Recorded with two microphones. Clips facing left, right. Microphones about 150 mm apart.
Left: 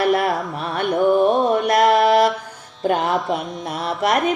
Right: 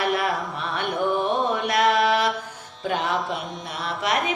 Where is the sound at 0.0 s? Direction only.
50° left (ahead or behind).